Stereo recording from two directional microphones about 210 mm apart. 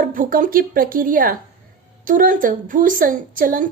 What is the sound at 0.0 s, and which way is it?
A woman's voice, 40° right (ahead or behind).